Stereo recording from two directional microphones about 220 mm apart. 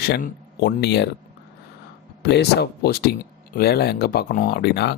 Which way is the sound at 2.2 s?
45° left (ahead or behind).